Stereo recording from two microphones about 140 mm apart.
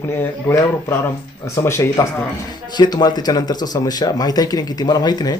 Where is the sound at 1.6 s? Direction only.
20° left (ahead or behind).